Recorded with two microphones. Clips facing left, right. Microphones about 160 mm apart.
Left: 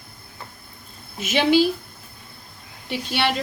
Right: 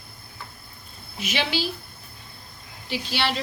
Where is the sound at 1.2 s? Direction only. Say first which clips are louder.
Left 9 dB; 50° left (ahead or behind).